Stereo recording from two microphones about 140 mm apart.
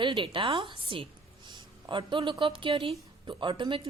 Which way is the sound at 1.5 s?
35° right (ahead or behind).